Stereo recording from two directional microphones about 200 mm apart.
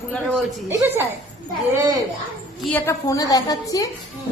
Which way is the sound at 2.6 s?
10° left (ahead or behind).